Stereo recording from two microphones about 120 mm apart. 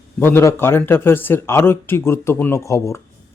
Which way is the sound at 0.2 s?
20° left (ahead or behind).